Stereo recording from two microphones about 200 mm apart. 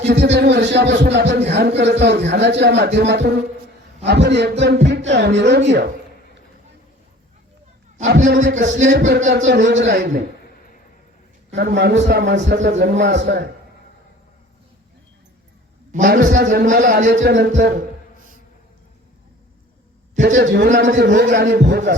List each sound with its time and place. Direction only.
0.0 s speech: 60° right (ahead or behind)
8.2 s a man's voice: 40° right (ahead or behind)
8.9 s speech: 55° right (ahead or behind)
11.5 s speech: 60° right (ahead or behind)
16.0 s speech: 60° right (ahead or behind)
20.1 s a man's voice: 40° right (ahead or behind)
20.4 s speech: 60° right (ahead or behind)